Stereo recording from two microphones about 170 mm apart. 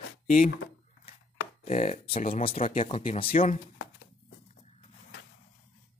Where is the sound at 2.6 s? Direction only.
35° left (ahead or behind).